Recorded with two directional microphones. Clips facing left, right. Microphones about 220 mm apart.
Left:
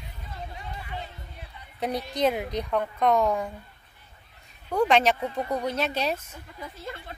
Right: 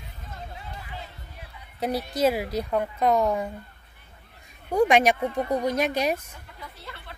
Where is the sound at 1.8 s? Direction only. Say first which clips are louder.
Right 2 dB; 5° right (ahead or behind).